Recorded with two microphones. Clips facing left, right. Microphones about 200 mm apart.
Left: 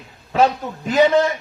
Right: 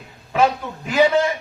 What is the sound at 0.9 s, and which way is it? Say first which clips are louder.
Speech: left 2 dB; 40° left (ahead or behind).